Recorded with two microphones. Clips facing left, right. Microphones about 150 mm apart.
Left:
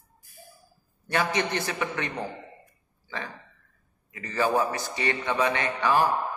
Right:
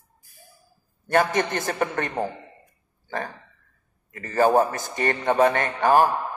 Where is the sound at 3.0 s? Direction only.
45° right (ahead or behind).